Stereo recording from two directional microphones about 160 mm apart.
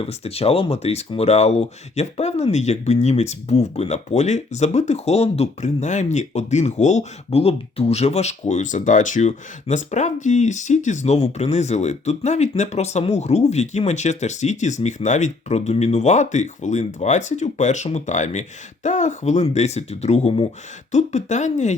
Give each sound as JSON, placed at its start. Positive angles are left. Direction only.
{"t": 0.0, "sound": "speech", "side_deg": 40}